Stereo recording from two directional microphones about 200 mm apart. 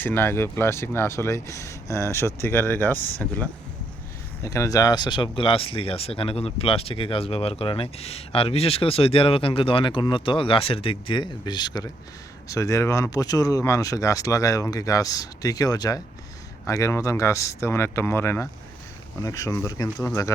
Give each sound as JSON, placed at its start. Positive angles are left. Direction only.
{"t": 0.0, "sound": "speech", "side_deg": 10}